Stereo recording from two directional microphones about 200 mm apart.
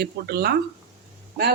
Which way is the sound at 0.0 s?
50° right (ahead or behind).